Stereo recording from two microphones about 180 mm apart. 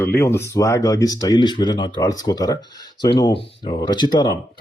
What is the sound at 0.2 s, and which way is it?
Speech, 15° left (ahead or behind).